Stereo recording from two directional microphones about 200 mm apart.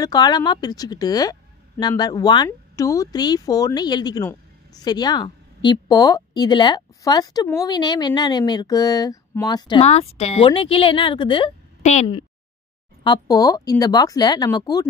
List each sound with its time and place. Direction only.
0.0 s a woman's voice: 20° left (ahead or behind)
13.0 s a woman's voice: 20° left (ahead or behind)